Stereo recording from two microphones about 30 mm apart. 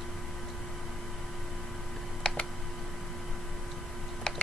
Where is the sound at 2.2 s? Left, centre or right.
Left.